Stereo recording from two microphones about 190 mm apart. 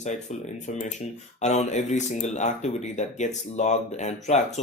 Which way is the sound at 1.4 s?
35° left (ahead or behind).